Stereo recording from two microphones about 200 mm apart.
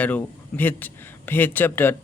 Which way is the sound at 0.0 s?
10° left (ahead or behind).